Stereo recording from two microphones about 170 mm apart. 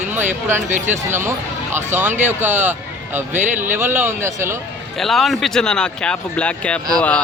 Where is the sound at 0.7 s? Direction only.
45° right (ahead or behind).